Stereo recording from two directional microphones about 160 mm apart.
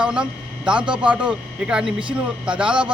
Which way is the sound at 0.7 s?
30° right (ahead or behind).